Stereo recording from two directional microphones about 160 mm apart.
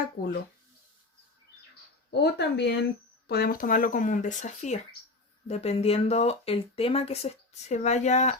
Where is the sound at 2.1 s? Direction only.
90° left.